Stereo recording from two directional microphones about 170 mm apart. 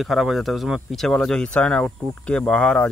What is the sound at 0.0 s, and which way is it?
Speech, centre (ahead or behind).